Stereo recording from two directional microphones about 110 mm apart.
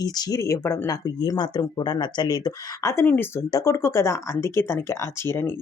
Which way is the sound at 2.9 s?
20° left (ahead or behind).